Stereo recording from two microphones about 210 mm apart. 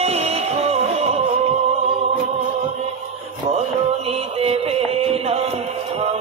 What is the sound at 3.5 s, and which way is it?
Music, 30° right (ahead or behind).